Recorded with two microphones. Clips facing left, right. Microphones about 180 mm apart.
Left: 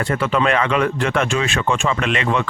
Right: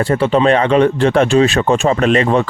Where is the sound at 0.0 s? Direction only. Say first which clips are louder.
Right 6 dB; 30° right (ahead or behind).